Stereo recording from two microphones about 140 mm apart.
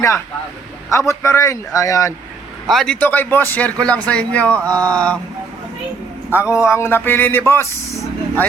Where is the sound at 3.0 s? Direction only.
15° left (ahead or behind).